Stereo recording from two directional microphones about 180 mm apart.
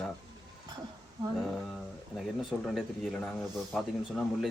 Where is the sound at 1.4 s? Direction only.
Centre (ahead or behind).